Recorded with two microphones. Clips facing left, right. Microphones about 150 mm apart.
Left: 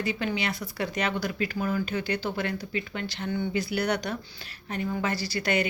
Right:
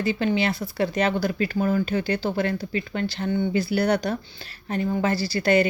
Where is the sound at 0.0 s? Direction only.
30° right (ahead or behind).